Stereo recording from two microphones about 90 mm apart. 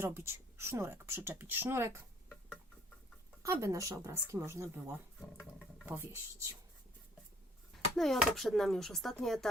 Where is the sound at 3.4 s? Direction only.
35° right (ahead or behind).